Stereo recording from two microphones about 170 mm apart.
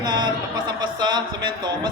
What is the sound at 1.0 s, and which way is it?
Speech, 25° right (ahead or behind).